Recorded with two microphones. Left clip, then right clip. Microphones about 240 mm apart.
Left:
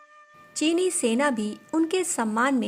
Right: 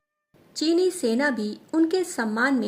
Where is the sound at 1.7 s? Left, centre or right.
Left.